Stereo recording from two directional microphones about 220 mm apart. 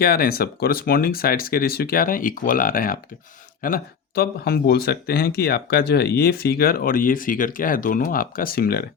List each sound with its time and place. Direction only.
0.0 s speech: 45° left (ahead or behind)